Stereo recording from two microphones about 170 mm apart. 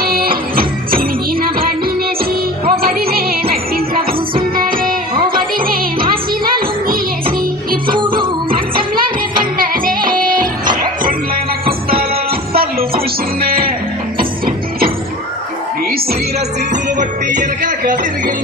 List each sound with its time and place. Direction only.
0.0 s music: 60° right (ahead or behind)
2.7 s music: 60° right (ahead or behind)
8.0 s music: 30° right (ahead or behind)
8.5 s music: 60° right (ahead or behind)
17.4 s music: 50° right (ahead or behind)